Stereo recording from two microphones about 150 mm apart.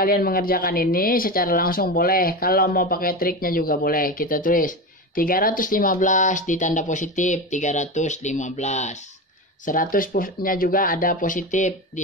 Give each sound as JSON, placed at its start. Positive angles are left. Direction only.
{"t": 0.0, "sound": "a woman's voice", "side_deg": 80}
{"t": 9.7, "sound": "a woman's voice", "side_deg": 65}